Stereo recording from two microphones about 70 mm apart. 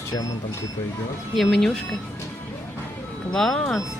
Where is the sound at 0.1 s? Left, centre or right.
Left.